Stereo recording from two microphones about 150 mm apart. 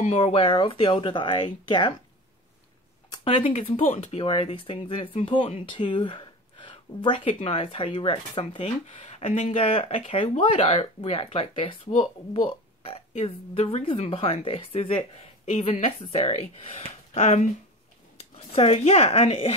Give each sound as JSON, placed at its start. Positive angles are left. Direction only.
{"t": 0.2, "sound": "speech", "side_deg": 35}
{"t": 3.1, "sound": "speech", "side_deg": 35}
{"t": 18.5, "sound": "speech", "side_deg": 40}